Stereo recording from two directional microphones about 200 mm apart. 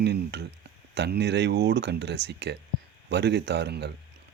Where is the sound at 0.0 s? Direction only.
55° right (ahead or behind).